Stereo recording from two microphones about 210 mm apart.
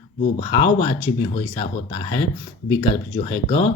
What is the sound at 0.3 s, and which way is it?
Speech, 25° left (ahead or behind).